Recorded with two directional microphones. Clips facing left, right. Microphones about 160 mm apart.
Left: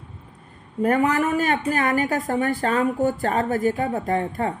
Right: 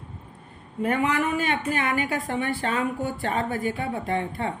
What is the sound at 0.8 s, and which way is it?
A woman's voice, 45° left (ahead or behind).